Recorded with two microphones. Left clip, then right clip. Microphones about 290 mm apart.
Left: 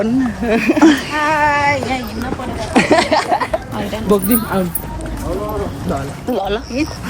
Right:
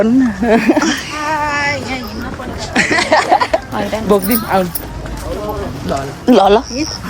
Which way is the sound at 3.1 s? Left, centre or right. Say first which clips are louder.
Right 4 dB; right.